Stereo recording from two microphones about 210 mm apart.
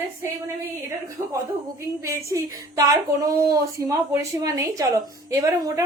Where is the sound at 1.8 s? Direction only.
15° right (ahead or behind).